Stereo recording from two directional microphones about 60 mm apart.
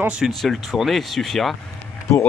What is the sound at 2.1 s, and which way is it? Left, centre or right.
Speech, left.